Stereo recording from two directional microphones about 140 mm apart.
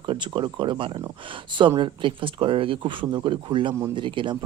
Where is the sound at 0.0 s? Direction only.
35° right (ahead or behind).